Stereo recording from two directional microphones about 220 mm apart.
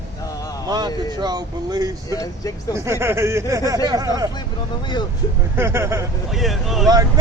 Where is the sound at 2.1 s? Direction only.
15° left (ahead or behind).